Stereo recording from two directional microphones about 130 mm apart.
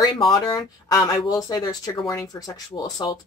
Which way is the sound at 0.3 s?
30° left (ahead or behind).